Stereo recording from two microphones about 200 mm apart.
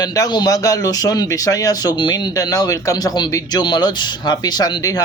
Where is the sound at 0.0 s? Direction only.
20° left (ahead or behind).